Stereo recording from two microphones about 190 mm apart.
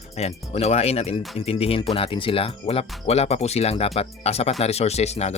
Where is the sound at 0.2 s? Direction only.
35° left (ahead or behind).